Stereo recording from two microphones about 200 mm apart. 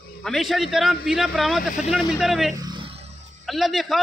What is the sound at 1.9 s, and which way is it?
Speech, centre (ahead or behind).